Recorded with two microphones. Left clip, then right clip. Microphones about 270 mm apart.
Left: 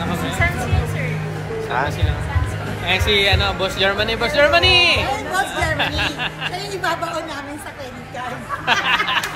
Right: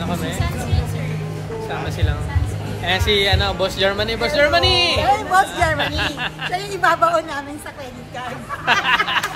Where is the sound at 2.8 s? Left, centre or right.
Centre.